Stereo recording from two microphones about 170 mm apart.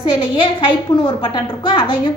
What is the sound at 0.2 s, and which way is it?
A woman's voice, 30° left (ahead or behind).